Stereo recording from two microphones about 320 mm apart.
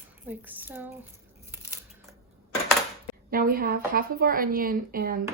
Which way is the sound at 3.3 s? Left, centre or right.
Right.